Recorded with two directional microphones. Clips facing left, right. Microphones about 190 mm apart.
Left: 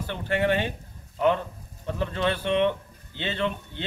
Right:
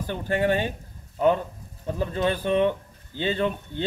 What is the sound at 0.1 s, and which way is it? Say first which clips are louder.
Speech: right 1 dB; 40° right (ahead or behind).